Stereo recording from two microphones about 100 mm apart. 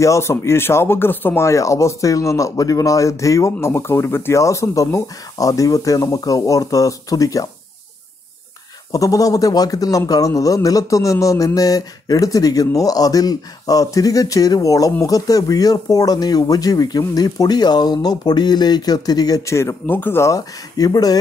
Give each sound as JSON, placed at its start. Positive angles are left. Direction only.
{"t": 0.0, "sound": "a man's voice", "side_deg": 30}
{"t": 8.9, "sound": "a man's voice", "side_deg": 35}